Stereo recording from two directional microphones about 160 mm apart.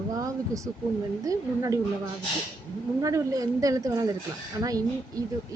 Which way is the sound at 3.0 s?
20° right (ahead or behind).